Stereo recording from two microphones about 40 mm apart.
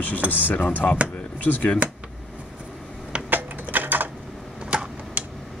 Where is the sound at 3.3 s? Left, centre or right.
Right.